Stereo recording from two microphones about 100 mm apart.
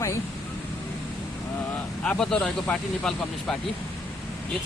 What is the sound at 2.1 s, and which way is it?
Speech, 10° left (ahead or behind).